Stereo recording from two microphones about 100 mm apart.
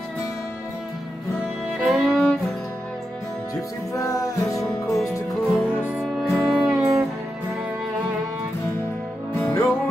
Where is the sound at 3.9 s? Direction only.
35° left (ahead or behind).